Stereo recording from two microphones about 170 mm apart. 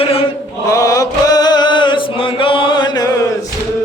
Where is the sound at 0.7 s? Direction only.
20° left (ahead or behind).